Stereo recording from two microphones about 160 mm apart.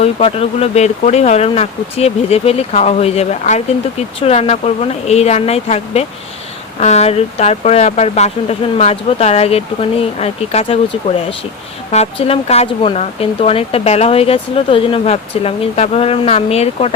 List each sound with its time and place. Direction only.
0.0 s speech: 40° left (ahead or behind)
11.9 s speech: 40° left (ahead or behind)